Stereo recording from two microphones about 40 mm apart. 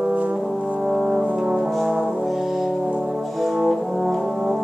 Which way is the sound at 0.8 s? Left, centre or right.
Centre.